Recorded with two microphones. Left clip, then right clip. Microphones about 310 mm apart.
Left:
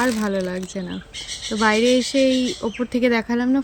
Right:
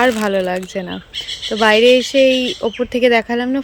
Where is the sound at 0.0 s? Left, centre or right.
Centre.